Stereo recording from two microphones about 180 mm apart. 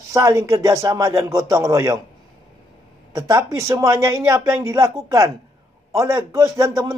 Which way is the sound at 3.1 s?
20° right (ahead or behind).